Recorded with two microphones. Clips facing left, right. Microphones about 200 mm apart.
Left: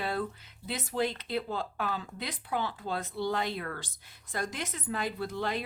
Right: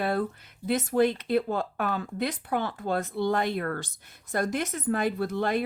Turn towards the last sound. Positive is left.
turn(degrees=-55)  # may be behind; listen again after turning